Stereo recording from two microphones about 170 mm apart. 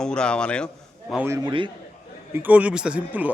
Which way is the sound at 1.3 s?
30° right (ahead or behind).